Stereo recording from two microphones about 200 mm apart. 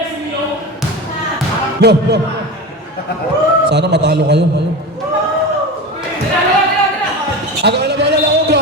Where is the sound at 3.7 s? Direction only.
55° right (ahead or behind).